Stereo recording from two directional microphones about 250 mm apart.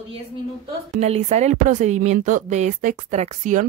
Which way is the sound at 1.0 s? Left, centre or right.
Right.